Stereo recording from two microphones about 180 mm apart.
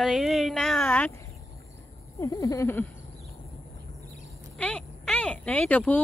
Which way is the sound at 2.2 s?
20° left (ahead or behind).